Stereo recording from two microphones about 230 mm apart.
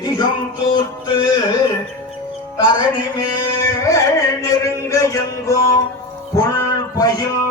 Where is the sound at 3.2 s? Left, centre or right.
Centre.